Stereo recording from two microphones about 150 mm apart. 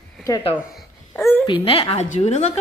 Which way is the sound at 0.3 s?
20° left (ahead or behind).